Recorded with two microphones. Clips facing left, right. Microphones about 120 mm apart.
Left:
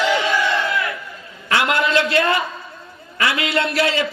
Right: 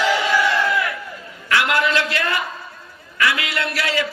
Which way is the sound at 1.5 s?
25° left (ahead or behind).